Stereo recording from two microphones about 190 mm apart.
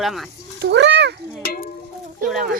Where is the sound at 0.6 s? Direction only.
65° right (ahead or behind).